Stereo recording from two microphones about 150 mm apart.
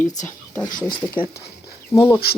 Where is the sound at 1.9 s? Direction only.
25° left (ahead or behind).